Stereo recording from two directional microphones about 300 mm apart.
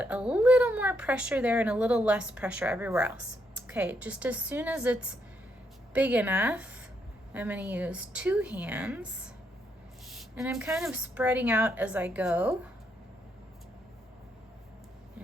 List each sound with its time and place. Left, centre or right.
0.0 s speech: centre